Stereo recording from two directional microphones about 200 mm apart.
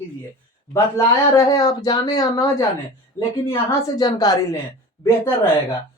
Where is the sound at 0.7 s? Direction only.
15° left (ahead or behind).